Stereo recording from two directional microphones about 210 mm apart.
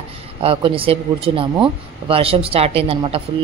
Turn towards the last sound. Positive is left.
turn(degrees=-25)  # may be behind; listen again after turning